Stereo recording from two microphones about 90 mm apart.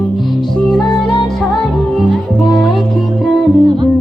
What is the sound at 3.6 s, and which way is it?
Music, 60° right (ahead or behind).